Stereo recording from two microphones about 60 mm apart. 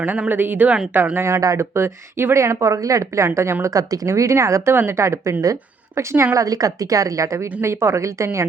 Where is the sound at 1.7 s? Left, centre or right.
Right.